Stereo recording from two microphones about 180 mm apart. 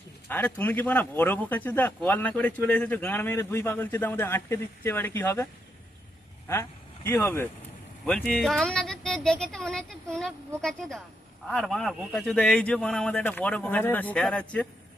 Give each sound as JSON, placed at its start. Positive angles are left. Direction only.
{"t": 0.3, "sound": "speech", "side_deg": 10}
{"t": 6.5, "sound": "speech", "side_deg": 15}